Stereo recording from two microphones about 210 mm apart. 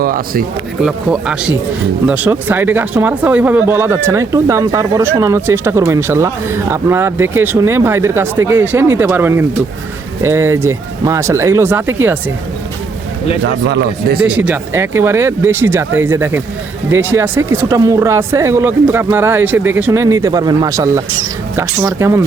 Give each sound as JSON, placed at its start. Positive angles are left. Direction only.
{"t": 0.0, "sound": "speech", "side_deg": -45}
{"t": 0.8, "sound": "speech", "side_deg": -5}
{"t": 13.4, "sound": "speech", "side_deg": -55}
{"t": 14.3, "sound": "speech", "side_deg": -5}